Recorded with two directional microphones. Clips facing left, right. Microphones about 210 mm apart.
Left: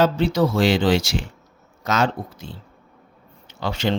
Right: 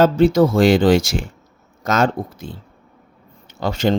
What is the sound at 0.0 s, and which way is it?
Speech, 50° right (ahead or behind).